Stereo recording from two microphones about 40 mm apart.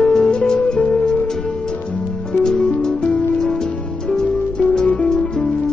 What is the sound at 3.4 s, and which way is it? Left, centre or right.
Music, centre.